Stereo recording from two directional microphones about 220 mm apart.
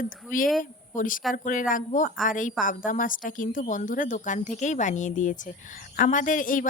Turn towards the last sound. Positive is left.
turn(degrees=35)  # may be behind; listen again after turning